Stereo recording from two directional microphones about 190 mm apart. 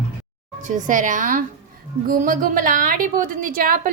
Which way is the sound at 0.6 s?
40° right (ahead or behind).